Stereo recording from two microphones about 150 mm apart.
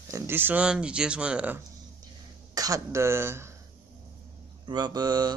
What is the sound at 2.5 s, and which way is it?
Speech, 25° right (ahead or behind).